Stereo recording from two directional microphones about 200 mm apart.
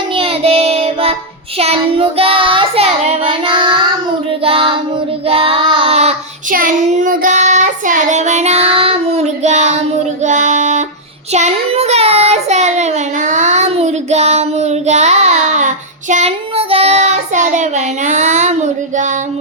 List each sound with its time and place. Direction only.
0.2 s child singing: 30° right (ahead or behind)
6.5 s child singing: 45° right (ahead or behind)